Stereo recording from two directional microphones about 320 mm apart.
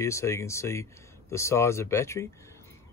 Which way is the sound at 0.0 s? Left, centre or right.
Centre.